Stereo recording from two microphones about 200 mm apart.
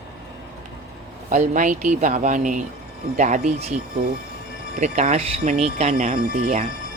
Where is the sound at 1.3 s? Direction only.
40° right (ahead or behind).